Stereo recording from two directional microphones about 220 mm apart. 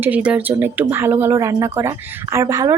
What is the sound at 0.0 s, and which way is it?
Speech, 5° right (ahead or behind).